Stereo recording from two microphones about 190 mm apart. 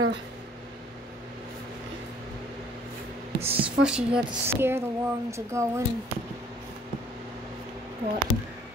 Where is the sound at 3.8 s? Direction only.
5° right (ahead or behind).